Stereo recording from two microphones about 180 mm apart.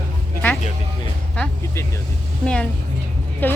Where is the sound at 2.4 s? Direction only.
5° left (ahead or behind).